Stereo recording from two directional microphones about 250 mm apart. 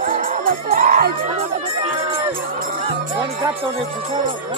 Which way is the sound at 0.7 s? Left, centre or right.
Right.